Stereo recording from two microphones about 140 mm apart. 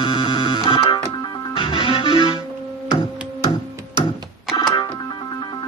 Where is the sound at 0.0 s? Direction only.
35° left (ahead or behind).